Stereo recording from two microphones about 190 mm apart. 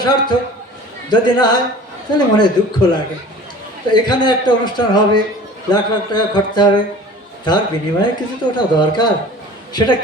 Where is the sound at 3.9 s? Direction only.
25° left (ahead or behind).